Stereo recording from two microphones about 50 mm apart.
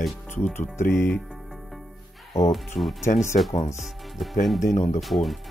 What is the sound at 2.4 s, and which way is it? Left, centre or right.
Speech, left.